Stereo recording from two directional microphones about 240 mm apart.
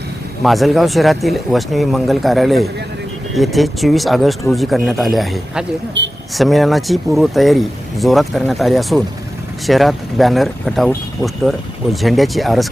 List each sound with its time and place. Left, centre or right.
0.4 s speech: centre
6.0 s speech: right
6.3 s speech: centre